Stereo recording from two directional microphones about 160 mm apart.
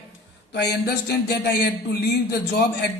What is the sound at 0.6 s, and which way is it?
Speech, 80° left.